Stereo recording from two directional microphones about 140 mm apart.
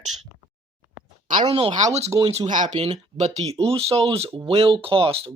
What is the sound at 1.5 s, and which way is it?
Speech, 40° right (ahead or behind).